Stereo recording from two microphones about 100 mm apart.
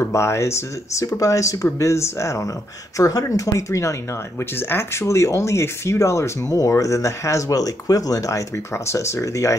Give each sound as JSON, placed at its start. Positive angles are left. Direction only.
{"t": 0.0, "sound": "speech", "side_deg": 25}